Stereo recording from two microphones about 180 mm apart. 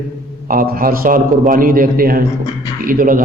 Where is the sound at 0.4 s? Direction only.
50° right (ahead or behind).